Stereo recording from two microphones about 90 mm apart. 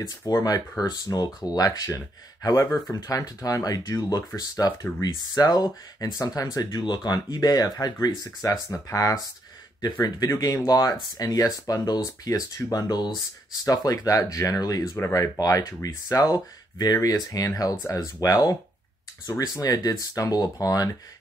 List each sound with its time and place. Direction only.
0.1 s speech: 35° left (ahead or behind)
8.6 s speech: 35° left (ahead or behind)
15.0 s speech: 25° left (ahead or behind)
15.3 s speech: 40° left (ahead or behind)